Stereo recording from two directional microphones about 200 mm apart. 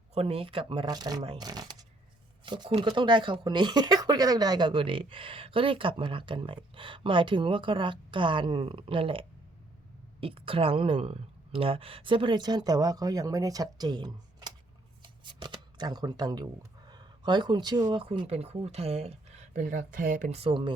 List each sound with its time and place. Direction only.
0.1 s speech: 30° right (ahead or behind)
15.0 s shuffling cards: 25° right (ahead or behind)
16.9 s speech: 20° right (ahead or behind)
19.5 s speech: 40° right (ahead or behind); by 20.7 s 25° right (ahead or behind)